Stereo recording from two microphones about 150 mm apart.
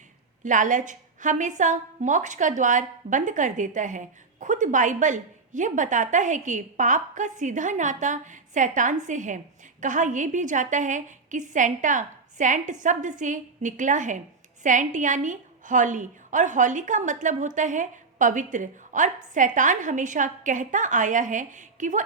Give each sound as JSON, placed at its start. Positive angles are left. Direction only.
{"t": 0.4, "sound": "a woman's voice", "side_deg": -55}